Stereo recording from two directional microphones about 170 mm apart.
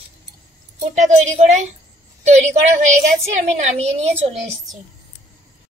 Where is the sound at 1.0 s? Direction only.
45° right (ahead or behind).